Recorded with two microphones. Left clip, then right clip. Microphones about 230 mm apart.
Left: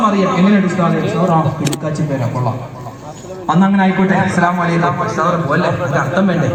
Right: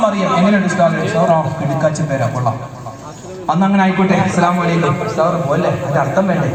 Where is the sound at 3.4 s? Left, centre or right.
Right.